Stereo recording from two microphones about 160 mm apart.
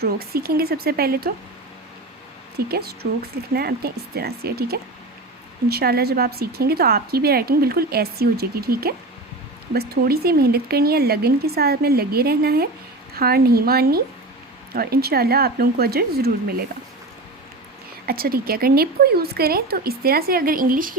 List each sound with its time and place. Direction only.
0.0 s speech: 75° right (ahead or behind)
2.6 s speech: 80° right
18.0 s speech: 70° right (ahead or behind)